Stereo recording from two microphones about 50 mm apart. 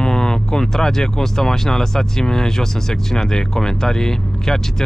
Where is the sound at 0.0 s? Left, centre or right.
Centre.